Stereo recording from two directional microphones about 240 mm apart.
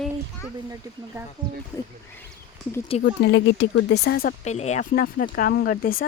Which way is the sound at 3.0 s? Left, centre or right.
Left.